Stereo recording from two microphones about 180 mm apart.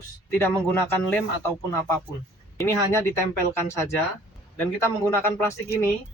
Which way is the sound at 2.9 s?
15° left (ahead or behind).